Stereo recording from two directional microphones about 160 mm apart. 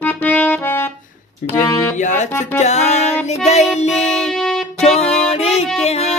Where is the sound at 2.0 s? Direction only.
50° left (ahead or behind).